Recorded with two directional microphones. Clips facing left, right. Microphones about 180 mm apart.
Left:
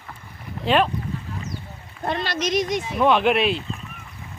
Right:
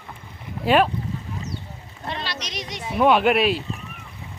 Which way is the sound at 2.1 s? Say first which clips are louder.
Left 8 dB; 50° left (ahead or behind).